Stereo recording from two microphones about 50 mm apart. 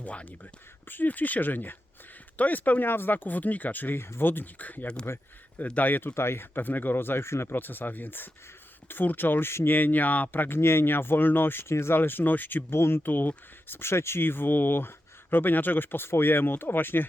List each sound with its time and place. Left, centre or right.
0.0 s speech: left
0.9 s speech: left
5.1 s speech: left
5.6 s speech: left
6.1 s speech: left
10.6 s speech: left
11.7 s speech: left
11.9 s speech: left
12.7 s speech: left